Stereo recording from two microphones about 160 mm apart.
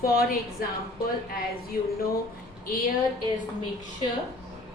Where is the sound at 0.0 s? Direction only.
70° left (ahead or behind).